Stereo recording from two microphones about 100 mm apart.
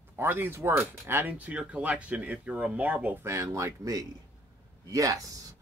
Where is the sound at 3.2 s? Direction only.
30° right (ahead or behind).